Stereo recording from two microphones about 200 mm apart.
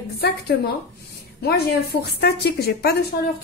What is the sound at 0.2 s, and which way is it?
A woman's voice, 55° left (ahead or behind).